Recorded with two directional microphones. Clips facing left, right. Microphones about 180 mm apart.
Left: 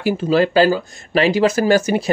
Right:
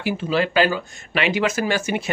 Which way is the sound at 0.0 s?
40° left (ahead or behind).